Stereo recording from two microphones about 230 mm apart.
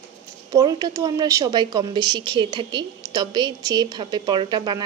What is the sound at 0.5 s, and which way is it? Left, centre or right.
A woman's voice, centre.